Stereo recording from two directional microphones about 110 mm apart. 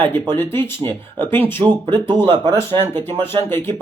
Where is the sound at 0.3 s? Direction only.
20° left (ahead or behind).